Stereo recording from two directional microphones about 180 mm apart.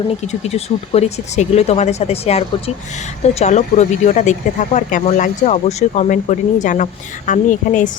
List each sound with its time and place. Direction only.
0.3 s speech: 35° left (ahead or behind)